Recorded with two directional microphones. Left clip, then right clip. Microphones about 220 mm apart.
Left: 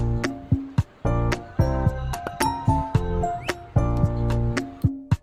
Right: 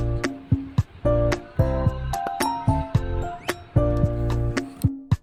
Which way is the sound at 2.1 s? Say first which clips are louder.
Right 1 dB; centre (ahead or behind).